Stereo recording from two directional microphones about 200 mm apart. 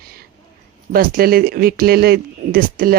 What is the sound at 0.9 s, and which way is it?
Speech, 45° right (ahead or behind).